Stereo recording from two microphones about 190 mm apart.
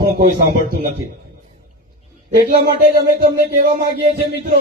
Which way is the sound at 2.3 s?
50° right (ahead or behind).